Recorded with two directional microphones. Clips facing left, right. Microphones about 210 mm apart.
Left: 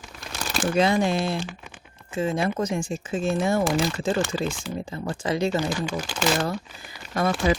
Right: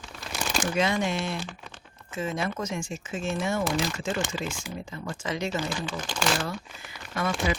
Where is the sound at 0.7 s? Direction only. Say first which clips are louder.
Left 6 dB; 35° left (ahead or behind).